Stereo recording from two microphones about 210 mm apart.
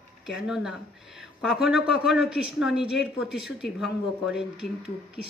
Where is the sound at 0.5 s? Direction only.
5° right (ahead or behind).